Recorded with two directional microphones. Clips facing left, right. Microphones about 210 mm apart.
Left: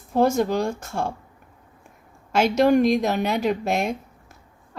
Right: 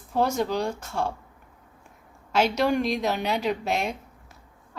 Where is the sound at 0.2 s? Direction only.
50° left (ahead or behind).